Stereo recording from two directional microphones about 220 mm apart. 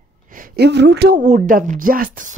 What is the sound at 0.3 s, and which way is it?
Speech, 45° right (ahead or behind).